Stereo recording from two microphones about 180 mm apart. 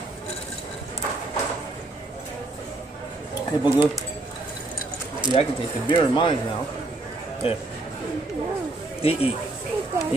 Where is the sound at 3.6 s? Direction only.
15° right (ahead or behind).